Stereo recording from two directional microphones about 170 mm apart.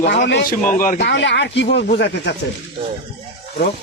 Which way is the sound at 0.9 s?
90° left.